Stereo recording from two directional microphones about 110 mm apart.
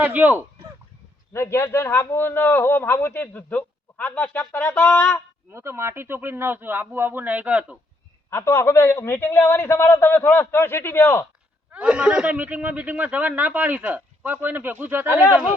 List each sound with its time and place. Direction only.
0.0 s speech: 15° right (ahead or behind)
1.3 s a man's voice: 25° left (ahead or behind)
5.5 s speech: 25° right (ahead or behind)
8.3 s a man's voice: 25° left (ahead or behind)
11.7 s speech: 10° right (ahead or behind)